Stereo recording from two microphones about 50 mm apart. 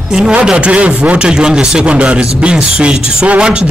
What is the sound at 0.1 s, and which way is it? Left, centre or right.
A man's voice, centre.